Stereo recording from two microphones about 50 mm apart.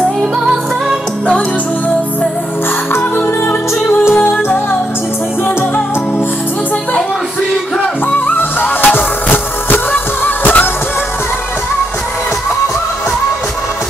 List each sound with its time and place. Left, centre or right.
0.0 s music: centre
3.2 s music: left
8.1 s music: left